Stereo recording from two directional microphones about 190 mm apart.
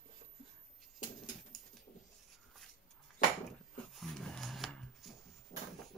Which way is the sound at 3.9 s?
Centre (ahead or behind).